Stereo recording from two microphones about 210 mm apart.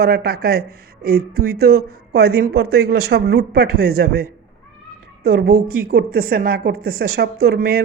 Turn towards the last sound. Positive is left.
turn(degrees=-45)  # may be behind; listen again after turning